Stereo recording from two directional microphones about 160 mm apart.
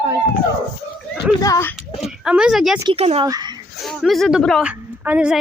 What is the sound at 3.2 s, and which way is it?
Speech, 25° right (ahead or behind).